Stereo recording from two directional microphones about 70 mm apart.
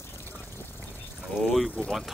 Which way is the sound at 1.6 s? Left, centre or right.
Centre.